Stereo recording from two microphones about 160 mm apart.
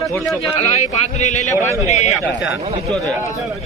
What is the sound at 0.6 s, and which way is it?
Speech, 45° left (ahead or behind).